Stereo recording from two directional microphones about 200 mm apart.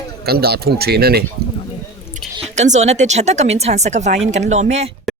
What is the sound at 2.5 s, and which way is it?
Speech, 35° right (ahead or behind).